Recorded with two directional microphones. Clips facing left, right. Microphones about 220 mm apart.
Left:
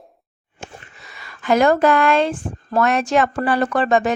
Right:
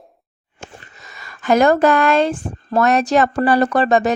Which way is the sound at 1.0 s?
45° right (ahead or behind).